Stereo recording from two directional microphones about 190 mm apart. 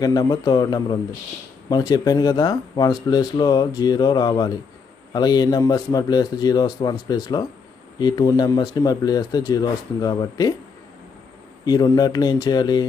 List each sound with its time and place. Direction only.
0.0 s speech: 20° left (ahead or behind)
11.6 s speech: 20° left (ahead or behind)